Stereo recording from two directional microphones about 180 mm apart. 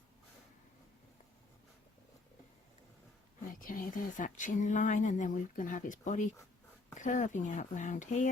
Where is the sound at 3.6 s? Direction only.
50° left (ahead or behind).